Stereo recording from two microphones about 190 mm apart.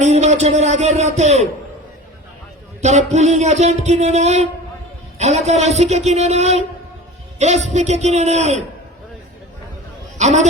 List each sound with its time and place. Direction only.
0.0 s a sound: 35° right (ahead or behind)
2.8 s speech: 35° right (ahead or behind)
10.2 s a man's voice: 40° right (ahead or behind)